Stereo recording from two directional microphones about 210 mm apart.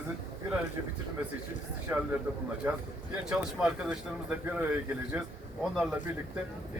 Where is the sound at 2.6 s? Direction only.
10° right (ahead or behind).